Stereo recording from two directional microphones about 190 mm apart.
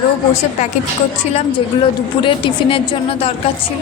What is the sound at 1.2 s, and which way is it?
Speech, 35° left (ahead or behind).